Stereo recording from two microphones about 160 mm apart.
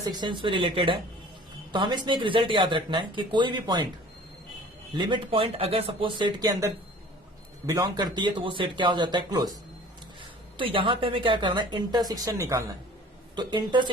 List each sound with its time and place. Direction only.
0.0 s speech: 25° right (ahead or behind)
4.9 s speech: 30° right (ahead or behind)
10.6 s speech: 35° right (ahead or behind)